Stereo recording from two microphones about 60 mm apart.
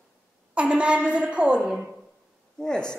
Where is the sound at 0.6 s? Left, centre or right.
Centre.